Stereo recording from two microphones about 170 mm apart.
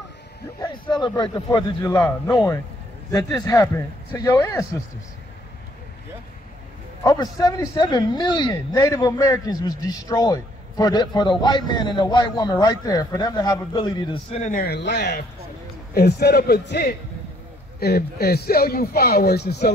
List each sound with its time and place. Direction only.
0.6 s speech: 25° left (ahead or behind)
1.9 s a man's voice: 15° left (ahead or behind)
7.0 s speech: 25° left (ahead or behind)
14.3 s speech: 50° left (ahead or behind); by 15.2 s 85° left
15.9 s speech: 65° left (ahead or behind)